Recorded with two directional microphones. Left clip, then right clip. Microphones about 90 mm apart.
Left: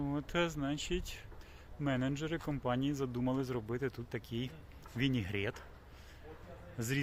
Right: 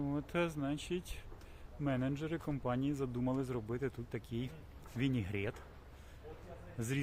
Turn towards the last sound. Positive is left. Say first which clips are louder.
# left 2 dB
turn(degrees=20)  # may be behind; listen again after turning